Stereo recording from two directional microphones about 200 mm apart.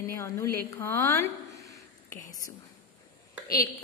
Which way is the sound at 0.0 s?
15° left (ahead or behind).